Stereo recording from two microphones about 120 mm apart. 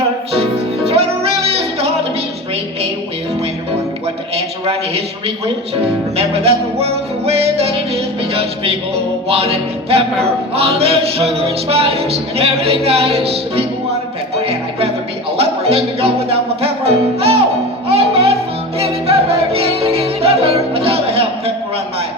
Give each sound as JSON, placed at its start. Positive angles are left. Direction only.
{"t": 0.9, "sound": "music", "side_deg": -55}
{"t": 6.1, "sound": "music", "side_deg": -55}
{"t": 15.4, "sound": "music", "side_deg": -55}